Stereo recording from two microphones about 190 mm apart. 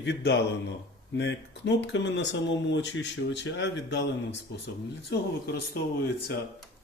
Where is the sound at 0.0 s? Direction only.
65° left (ahead or behind).